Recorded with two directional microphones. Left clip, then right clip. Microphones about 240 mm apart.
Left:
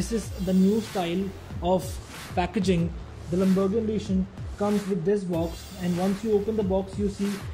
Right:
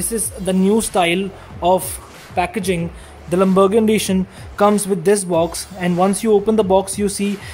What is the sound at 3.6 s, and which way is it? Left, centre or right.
Speech, right.